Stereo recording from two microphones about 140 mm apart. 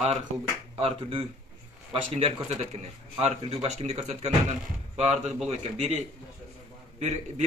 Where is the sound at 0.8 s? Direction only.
40° right (ahead or behind).